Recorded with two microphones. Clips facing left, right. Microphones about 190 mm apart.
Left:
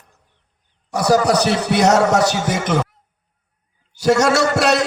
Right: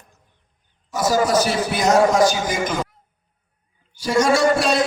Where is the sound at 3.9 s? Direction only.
75° left (ahead or behind).